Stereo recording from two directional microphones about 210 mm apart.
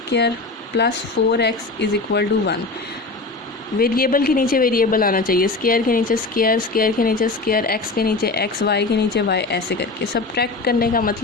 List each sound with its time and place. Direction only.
0.1 s a woman's voice: 55° left (ahead or behind)
3.8 s a woman's voice: 45° left (ahead or behind)